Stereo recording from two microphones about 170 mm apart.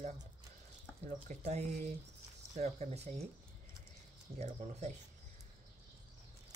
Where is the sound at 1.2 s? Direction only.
40° right (ahead or behind).